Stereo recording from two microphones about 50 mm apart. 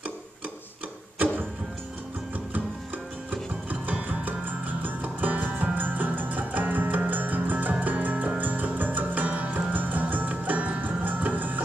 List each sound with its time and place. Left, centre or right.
3.8 s music: right